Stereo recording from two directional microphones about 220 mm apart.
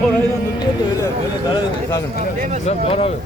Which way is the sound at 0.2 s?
15° left (ahead or behind).